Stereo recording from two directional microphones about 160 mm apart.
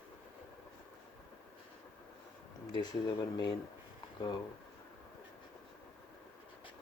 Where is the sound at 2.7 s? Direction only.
25° left (ahead or behind).